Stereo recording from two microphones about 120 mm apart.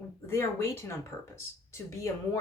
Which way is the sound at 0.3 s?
20° left (ahead or behind).